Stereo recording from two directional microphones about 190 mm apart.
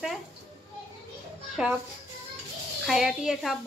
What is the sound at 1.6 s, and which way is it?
Speech, 5° right (ahead or behind).